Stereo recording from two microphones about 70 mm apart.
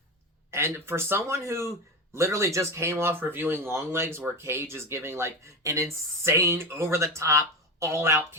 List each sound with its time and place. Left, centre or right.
0.5 s speech: right